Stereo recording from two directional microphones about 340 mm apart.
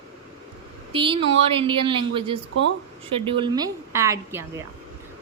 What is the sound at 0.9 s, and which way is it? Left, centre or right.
A woman's voice, centre.